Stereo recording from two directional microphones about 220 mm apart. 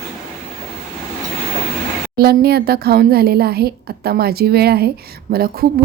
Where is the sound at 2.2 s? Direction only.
45° right (ahead or behind).